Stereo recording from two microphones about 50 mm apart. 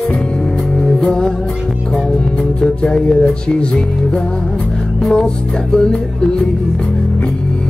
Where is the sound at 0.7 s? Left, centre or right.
Centre.